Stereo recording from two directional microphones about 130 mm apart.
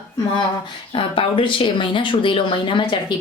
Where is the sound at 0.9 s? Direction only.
40° left (ahead or behind).